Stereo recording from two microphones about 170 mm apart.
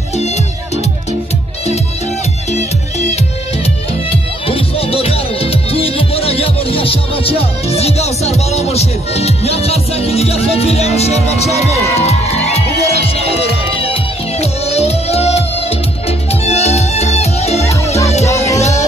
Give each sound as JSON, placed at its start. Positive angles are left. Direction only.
{"t": 2.5, "sound": "music", "side_deg": 40}
{"t": 4.5, "sound": "music", "side_deg": 35}